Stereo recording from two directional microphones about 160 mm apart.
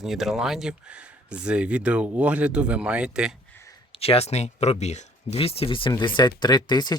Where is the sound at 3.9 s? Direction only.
40° left (ahead or behind).